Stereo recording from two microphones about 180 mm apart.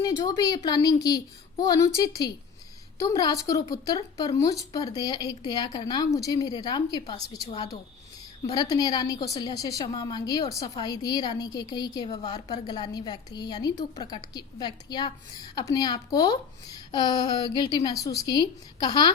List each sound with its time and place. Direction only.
0.0 s a woman's voice: 20° left (ahead or behind)
3.0 s a woman's voice: 20° left (ahead or behind)